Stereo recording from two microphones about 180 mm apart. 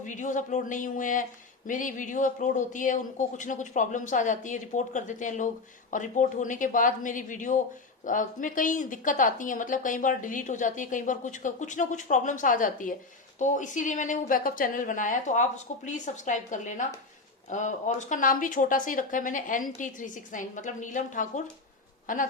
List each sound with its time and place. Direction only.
0.0 s speech: 45° left (ahead or behind)